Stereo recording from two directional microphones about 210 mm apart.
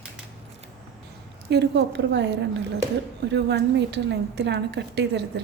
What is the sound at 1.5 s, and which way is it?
A woman's voice, 55° right (ahead or behind).